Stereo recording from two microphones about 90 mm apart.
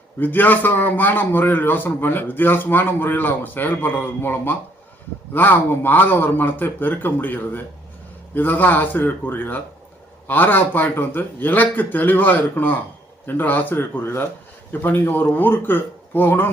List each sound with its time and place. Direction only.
0.2 s a man's voice: 20° left (ahead or behind)